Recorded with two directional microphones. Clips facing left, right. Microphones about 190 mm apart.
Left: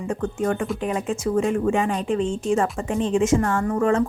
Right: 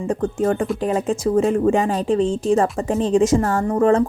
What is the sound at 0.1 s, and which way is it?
A woman's voice, 35° right (ahead or behind).